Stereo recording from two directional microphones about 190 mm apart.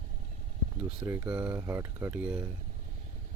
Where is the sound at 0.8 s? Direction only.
10° right (ahead or behind).